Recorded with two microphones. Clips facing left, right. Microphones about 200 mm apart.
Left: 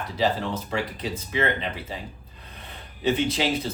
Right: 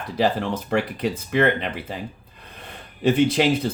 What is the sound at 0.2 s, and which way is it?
Speech, 60° right (ahead or behind).